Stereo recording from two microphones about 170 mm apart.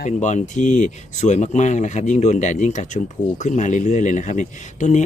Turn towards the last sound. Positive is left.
turn(degrees=45)  # may be behind; listen again after turning